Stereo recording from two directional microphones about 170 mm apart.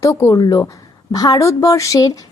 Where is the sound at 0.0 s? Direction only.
20° left (ahead or behind).